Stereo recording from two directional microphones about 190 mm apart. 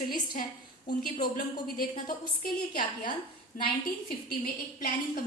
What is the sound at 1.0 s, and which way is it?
A woman's voice, 50° left (ahead or behind).